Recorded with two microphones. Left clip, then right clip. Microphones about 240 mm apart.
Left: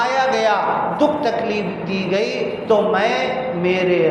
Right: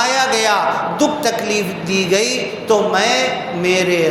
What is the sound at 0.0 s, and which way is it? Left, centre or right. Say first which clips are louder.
Music: right 2 dB; right.